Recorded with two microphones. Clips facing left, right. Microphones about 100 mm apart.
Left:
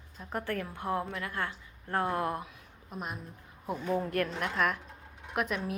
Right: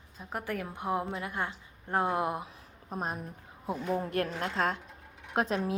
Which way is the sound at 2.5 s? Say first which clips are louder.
Right 4 dB; 35° right (ahead or behind).